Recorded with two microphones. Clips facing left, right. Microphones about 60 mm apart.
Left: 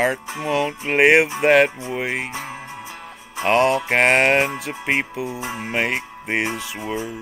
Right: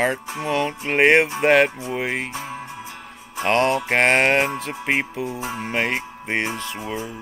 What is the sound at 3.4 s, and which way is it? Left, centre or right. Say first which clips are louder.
Music: left 2 dB; centre.